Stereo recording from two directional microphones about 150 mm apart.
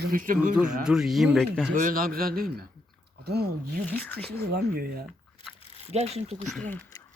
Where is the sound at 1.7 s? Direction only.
65° right (ahead or behind); by 3.8 s 90° right.